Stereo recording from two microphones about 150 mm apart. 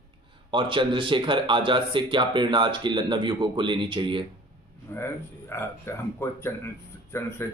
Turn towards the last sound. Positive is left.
turn(degrees=15)  # may be behind; listen again after turning